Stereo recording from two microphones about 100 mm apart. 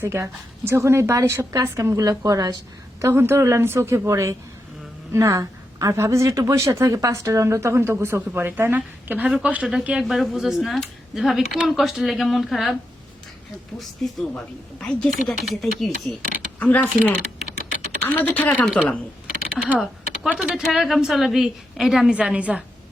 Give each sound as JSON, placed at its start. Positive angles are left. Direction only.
{"t": 0.0, "sound": "speech", "side_deg": -25}
{"t": 3.0, "sound": "speech", "side_deg": -25}
{"t": 13.7, "sound": "speech", "side_deg": 0}
{"t": 16.6, "sound": "speech", "side_deg": 15}
{"t": 19.8, "sound": "speech", "side_deg": 0}